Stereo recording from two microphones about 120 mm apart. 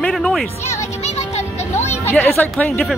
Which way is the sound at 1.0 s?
65° left (ahead or behind).